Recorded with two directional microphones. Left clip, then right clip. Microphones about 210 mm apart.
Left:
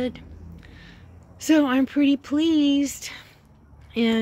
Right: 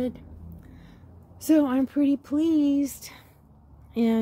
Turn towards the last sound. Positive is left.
turn(degrees=-5)  # may be behind; listen again after turning